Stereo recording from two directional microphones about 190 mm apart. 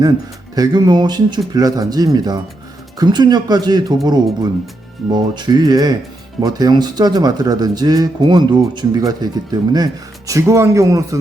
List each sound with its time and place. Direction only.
0.5 s speech: 20° right (ahead or behind)